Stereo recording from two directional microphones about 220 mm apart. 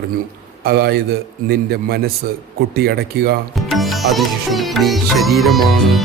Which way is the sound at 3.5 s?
Centre (ahead or behind).